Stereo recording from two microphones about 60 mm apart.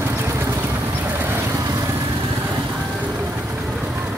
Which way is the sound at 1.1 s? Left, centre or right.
Right.